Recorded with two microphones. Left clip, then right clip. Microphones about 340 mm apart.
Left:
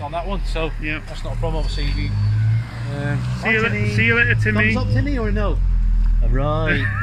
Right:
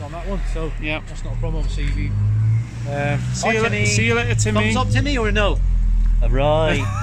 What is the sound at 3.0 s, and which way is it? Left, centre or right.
Speech, right.